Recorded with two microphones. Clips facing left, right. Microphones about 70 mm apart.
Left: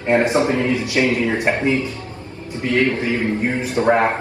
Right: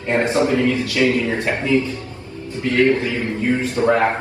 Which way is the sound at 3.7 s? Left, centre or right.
Left.